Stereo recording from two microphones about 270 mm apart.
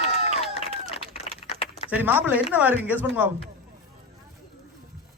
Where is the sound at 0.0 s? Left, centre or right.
Left.